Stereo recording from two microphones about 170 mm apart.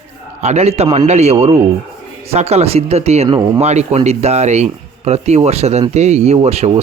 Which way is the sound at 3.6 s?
40° right (ahead or behind).